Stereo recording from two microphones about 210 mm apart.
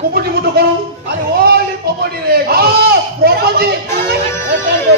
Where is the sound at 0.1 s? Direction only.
50° right (ahead or behind).